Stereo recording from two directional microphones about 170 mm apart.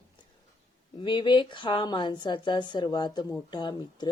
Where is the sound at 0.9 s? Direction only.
30° left (ahead or behind).